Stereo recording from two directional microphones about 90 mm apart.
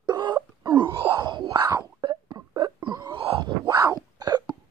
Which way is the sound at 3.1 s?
85° right.